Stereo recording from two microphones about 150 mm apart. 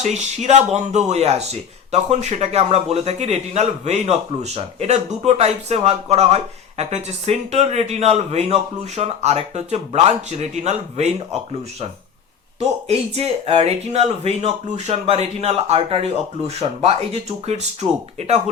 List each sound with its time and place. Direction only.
0.0 s speech: 50° right (ahead or behind)
12.5 s speech: 45° right (ahead or behind)